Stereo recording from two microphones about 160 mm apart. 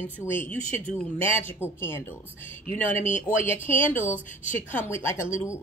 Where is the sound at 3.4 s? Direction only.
15° left (ahead or behind).